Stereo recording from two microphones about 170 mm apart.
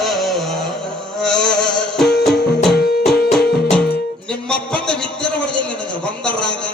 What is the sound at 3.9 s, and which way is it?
Music, 5° left (ahead or behind).